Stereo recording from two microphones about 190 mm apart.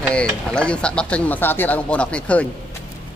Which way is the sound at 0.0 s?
5° left (ahead or behind).